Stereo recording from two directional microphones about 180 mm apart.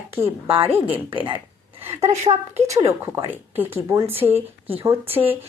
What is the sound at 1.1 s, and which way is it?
Speech, 30° right (ahead or behind).